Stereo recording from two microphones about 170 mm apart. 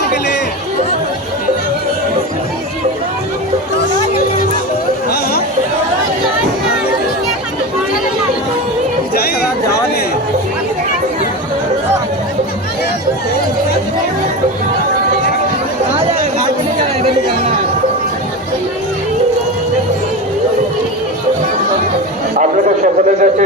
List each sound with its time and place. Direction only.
22.4 s a man's voice: 45° right (ahead or behind)